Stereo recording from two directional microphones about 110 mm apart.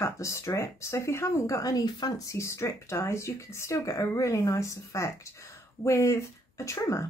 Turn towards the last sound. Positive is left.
turn(degrees=30)  # may be behind; listen again after turning